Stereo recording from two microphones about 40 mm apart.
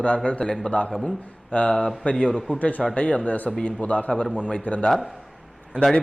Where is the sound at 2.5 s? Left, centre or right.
Left.